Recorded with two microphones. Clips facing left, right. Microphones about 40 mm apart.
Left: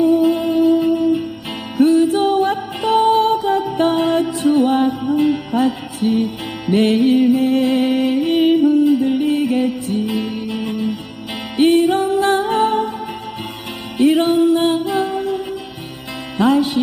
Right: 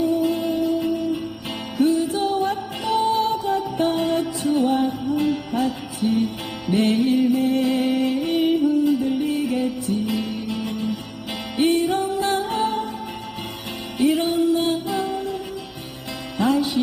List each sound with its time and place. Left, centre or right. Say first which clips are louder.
0.0 s music: left 7 dB; left
1.8 s music: left 7 dB; left
5.2 s music: left 6 dB; left
5.5 s music: left 6 dB; left
8.8 s music: left 5 dB; left
9.1 s music: left 6 dB; left
10.2 s music: left 4 dB; left
11.5 s music: left 6 dB; left
14.0 s music: left 6 dB; left
16.4 s music: left 5 dB; left